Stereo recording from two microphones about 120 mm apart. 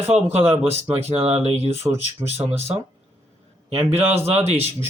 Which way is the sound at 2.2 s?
20° right (ahead or behind).